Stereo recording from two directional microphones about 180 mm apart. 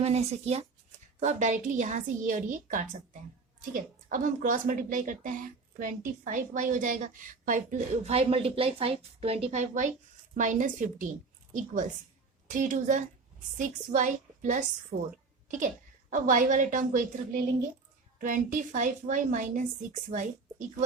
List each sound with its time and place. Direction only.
0.0 s a woman's voice: 35° right (ahead or behind)